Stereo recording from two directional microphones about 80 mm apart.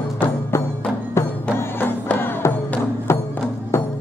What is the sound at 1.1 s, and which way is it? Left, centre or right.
Music, left.